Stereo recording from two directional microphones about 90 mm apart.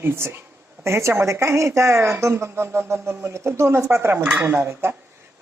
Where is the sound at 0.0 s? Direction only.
25° right (ahead or behind).